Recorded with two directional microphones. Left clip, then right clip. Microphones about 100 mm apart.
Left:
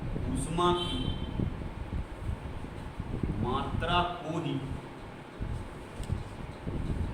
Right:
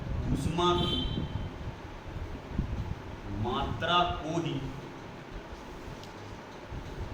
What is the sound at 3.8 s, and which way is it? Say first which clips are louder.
Speech: right 3 dB; 20° left (ahead or behind).